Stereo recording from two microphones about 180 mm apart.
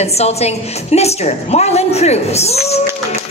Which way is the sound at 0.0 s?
35° left (ahead or behind).